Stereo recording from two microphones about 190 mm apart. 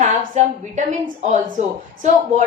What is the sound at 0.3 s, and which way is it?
A woman's voice, 40° right (ahead or behind).